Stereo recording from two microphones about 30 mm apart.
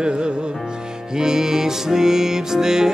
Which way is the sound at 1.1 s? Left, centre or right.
Right.